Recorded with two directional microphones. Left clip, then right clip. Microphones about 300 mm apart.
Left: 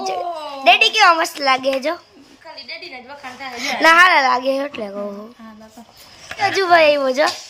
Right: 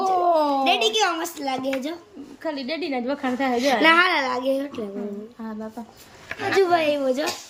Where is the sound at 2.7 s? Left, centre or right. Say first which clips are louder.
Right 5 dB; right.